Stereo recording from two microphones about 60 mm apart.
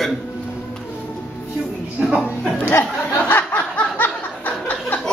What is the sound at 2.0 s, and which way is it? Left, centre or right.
Speech, centre.